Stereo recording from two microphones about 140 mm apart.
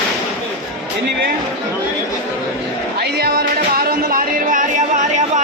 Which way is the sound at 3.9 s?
90° right.